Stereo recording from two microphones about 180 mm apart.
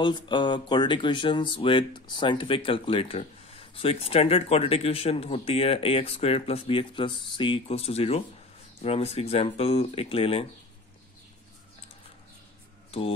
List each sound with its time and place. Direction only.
0.0 s speech: 25° left (ahead or behind)